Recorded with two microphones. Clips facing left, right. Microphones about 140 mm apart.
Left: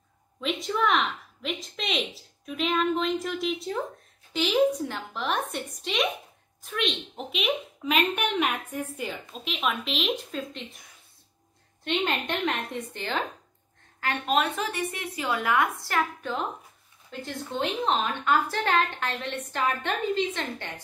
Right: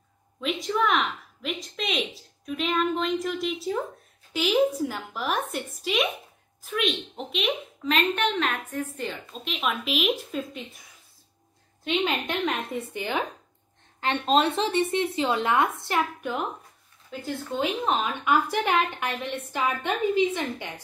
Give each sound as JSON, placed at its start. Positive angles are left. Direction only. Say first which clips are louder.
{"t": 0.4, "sound": "a sound", "louder": "right 1 dB", "side_deg": 0}
{"t": 4.3, "sound": "a woman's voice", "louder": "even", "side_deg": 0}
{"t": 11.8, "sound": "a woman's voice", "louder": "right 1 dB", "side_deg": 0}
{"t": 13.9, "sound": "a woman's voice", "louder": "right 3 dB", "side_deg": -25}